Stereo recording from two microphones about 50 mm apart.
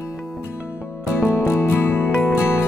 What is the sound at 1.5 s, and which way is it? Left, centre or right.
Music, left.